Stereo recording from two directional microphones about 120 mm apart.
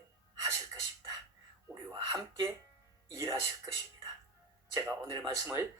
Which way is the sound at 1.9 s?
30° right (ahead or behind).